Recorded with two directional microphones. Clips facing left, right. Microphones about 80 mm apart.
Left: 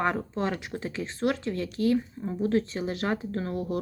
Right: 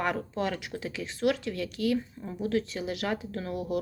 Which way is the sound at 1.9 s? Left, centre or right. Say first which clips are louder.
Left 4 dB; left.